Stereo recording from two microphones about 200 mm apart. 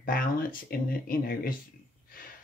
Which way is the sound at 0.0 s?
45° left (ahead or behind).